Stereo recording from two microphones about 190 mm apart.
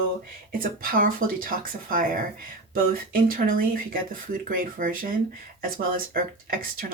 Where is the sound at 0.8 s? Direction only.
50° right (ahead or behind).